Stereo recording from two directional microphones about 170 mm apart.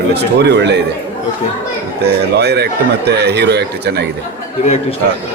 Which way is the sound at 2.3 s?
75° right (ahead or behind).